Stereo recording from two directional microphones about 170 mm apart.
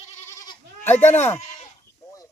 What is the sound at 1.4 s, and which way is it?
Goat, 40° left (ahead or behind).